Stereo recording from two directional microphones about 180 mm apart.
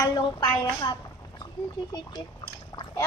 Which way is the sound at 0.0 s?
20° left (ahead or behind).